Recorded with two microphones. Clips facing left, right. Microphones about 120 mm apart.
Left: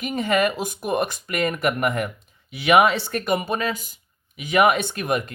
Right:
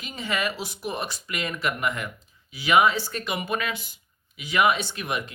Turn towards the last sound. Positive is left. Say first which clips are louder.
# left 6 dB
turn(degrees=50)  # may be behind; listen again after turning